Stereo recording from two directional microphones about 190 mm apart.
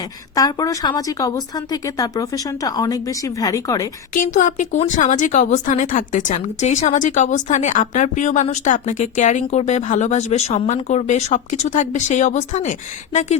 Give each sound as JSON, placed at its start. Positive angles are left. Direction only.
{"t": 0.3, "sound": "a woman's voice", "side_deg": 20}
{"t": 4.1, "sound": "speech", "side_deg": 45}